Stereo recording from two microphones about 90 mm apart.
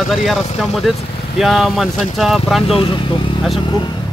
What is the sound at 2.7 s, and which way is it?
Speech, 75° left (ahead or behind).